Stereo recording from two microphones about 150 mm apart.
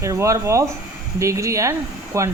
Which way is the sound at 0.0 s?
20° right (ahead or behind).